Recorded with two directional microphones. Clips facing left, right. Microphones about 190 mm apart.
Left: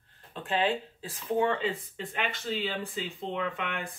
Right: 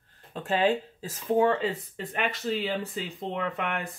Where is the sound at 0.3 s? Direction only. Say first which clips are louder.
Right 4 dB; 40° right (ahead or behind).